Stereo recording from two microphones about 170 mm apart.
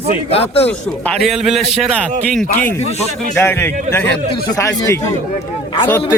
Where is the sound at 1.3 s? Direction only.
Centre (ahead or behind).